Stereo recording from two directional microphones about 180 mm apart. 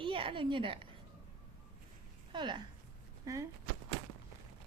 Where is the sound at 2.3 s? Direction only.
25° right (ahead or behind).